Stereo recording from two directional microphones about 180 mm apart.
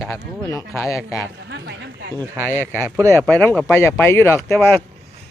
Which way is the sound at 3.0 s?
15° right (ahead or behind).